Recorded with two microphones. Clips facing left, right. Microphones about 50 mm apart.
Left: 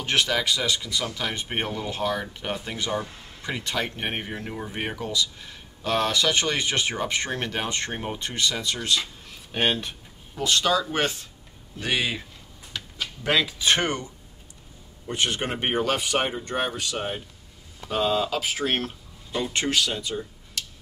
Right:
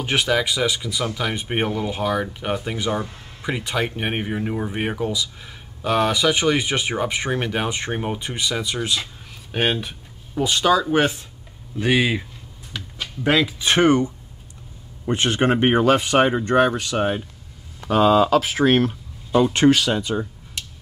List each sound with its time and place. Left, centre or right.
0.0 s speech: centre
12.7 s speech: centre
15.0 s speech: right
16.3 s speech: right
18.4 s speech: right
19.6 s speech: right